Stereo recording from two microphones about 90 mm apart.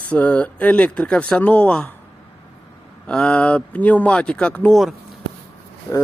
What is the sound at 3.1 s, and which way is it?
Speech, 10° left (ahead or behind).